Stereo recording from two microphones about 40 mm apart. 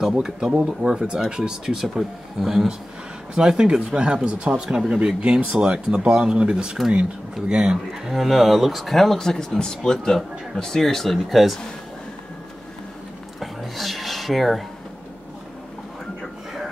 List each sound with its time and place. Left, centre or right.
0.0 s speech: centre
1.8 s speech: centre
5.2 s speech: right
7.9 s speech: centre
13.4 s a sound: centre